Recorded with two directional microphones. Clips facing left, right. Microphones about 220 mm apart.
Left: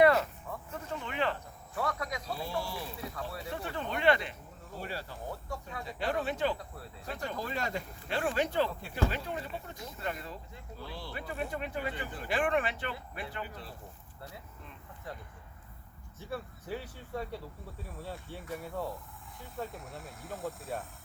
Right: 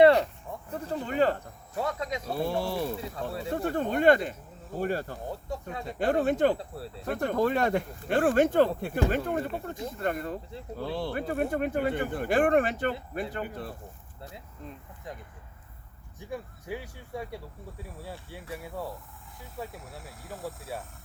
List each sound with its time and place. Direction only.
0.7 s a sound: 35° right (ahead or behind)
1.7 s speech: 25° right (ahead or behind)
2.2 s speech: 55° right (ahead or behind)
6.6 s speech: 30° right (ahead or behind)
7.0 s speech: 55° right (ahead or behind)
14.2 s speech: 20° right (ahead or behind)
16.1 s speech: 15° right (ahead or behind)
18.5 s speech: 5° right (ahead or behind)